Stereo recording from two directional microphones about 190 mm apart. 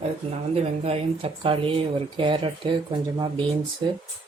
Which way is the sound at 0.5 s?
30° right (ahead or behind).